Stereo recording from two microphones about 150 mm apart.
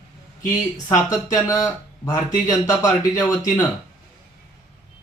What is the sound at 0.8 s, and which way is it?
Speech, 25° left (ahead or behind).